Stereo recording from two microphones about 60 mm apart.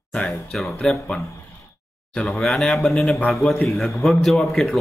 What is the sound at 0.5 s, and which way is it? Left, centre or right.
Speech, centre.